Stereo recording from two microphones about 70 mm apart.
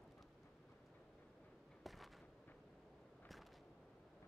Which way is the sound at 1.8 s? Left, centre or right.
Centre.